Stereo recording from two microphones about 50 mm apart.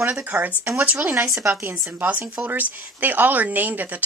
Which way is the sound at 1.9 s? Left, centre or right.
Right.